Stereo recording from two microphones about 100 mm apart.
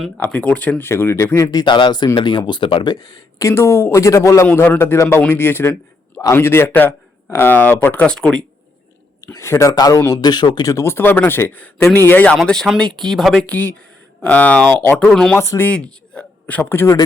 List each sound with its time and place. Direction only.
0.2 s speech: 15° left (ahead or behind); by 2.9 s 60° left (ahead or behind)
2.9 s speech: 40° left (ahead or behind); by 8.4 s 10° left (ahead or behind)
9.2 s speech: 30° left (ahead or behind); by 10.7 s 45° left (ahead or behind)
10.7 s speech: 30° left (ahead or behind)
12.4 s speech: 5° left (ahead or behind)
13.5 s speech: 20° left (ahead or behind)
15.7 s a man's voice: 10° left (ahead or behind)